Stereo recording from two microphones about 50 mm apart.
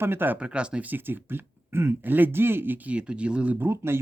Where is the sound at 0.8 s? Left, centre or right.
Right.